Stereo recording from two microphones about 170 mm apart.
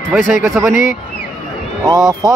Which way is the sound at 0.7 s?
50° left (ahead or behind).